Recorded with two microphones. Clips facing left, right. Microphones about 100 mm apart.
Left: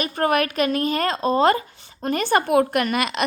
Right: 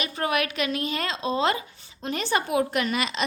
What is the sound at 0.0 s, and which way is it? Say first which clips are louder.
Speech: left 6 dB; 45° left (ahead or behind).